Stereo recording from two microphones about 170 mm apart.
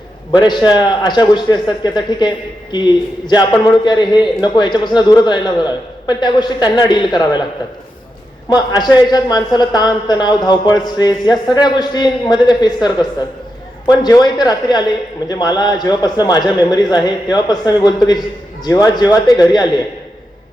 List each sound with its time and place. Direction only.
0.3 s a man's voice: 25° left (ahead or behind)
8.4 s a man's voice: 25° left (ahead or behind)